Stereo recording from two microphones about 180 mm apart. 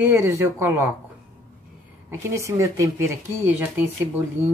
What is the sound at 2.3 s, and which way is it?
Speech, 15° right (ahead or behind).